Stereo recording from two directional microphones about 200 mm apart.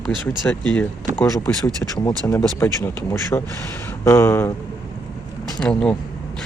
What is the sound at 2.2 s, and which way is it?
Speech, 15° left (ahead or behind).